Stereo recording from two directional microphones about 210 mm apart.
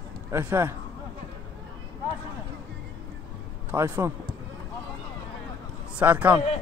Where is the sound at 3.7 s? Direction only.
10° right (ahead or behind).